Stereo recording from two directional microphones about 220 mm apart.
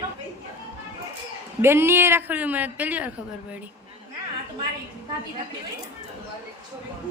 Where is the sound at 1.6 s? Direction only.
10° right (ahead or behind).